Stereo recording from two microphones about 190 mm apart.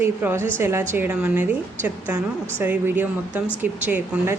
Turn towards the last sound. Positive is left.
turn(degrees=-10)  # may be behind; listen again after turning